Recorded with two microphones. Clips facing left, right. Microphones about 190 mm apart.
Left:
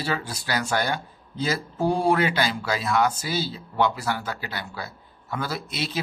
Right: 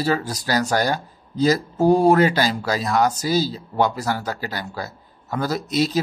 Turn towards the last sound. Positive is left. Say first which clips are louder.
# right 9 dB
turn(degrees=-40)  # may be behind; listen again after turning